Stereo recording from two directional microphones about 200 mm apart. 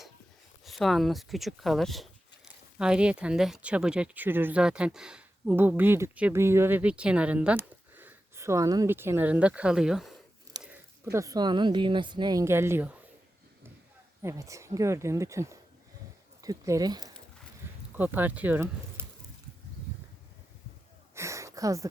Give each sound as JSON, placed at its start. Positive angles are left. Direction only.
{"t": 0.6, "sound": "speech", "side_deg": 0}
{"t": 14.2, "sound": "speech", "side_deg": -15}
{"t": 17.9, "sound": "speech", "side_deg": -10}
{"t": 21.2, "sound": "a sound", "side_deg": -15}